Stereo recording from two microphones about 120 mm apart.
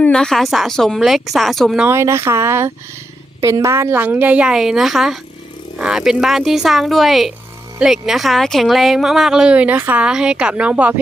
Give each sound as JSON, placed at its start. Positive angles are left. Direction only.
{"t": 0.0, "sound": "speech", "side_deg": 5}
{"t": 1.9, "sound": "a woman's voice", "side_deg": -20}